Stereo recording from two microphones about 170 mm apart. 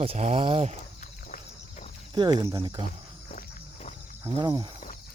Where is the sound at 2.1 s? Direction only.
25° right (ahead or behind).